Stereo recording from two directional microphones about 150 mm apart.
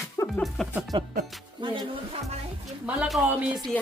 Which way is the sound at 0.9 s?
30° right (ahead or behind).